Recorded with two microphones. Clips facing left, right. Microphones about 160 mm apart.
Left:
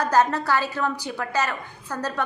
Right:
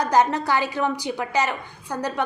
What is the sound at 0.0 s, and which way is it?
A woman's voice, 15° right (ahead or behind).